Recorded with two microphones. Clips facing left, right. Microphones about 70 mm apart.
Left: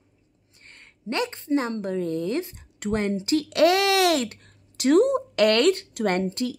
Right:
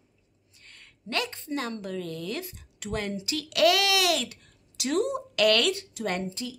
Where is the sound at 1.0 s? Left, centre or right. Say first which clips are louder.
Left 5 dB; left.